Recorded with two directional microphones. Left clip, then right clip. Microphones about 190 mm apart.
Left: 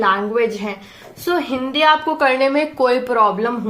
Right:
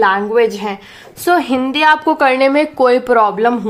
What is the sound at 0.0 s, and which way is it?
A woman's voice, 45° right (ahead or behind).